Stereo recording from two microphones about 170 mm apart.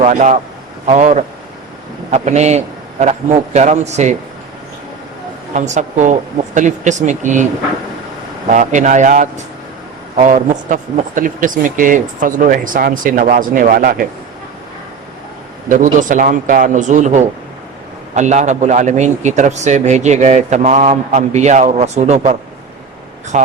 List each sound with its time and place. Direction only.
0.0 s a man's voice: 45° right (ahead or behind)
5.5 s a man's voice: 45° right (ahead or behind)
8.5 s a man's voice: 45° right (ahead or behind)
15.7 s a man's voice: 50° right (ahead or behind)